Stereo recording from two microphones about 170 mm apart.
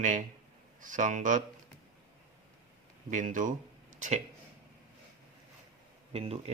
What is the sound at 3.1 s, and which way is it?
Speech, 50° right (ahead or behind).